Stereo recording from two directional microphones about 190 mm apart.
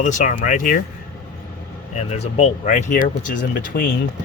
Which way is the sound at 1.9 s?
35° left (ahead or behind).